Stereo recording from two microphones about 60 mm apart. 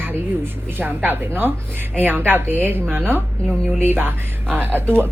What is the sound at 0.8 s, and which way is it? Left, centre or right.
A woman's voice, right.